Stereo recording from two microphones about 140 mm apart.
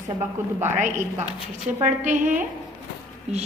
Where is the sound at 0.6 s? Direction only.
55° right (ahead or behind).